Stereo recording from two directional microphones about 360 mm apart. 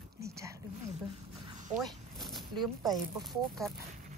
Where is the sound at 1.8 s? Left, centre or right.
Centre.